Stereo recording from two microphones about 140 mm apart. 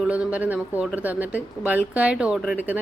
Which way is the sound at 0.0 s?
10° right (ahead or behind).